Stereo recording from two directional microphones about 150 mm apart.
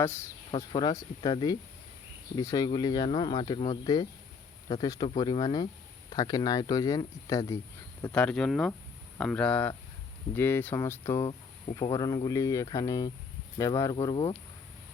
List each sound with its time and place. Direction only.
0.0 s speech: 15° left (ahead or behind)
0.5 s speech: 30° left (ahead or behind)
8.1 s speech: 5° left (ahead or behind); by 14.3 s 35° left (ahead or behind)